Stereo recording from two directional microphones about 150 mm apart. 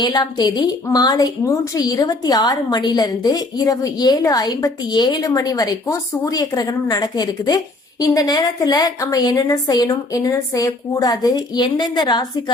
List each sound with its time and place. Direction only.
0.0 s a woman's voice: 30° left (ahead or behind)